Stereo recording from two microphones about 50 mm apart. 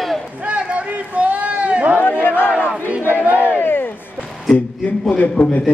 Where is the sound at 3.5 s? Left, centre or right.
Left.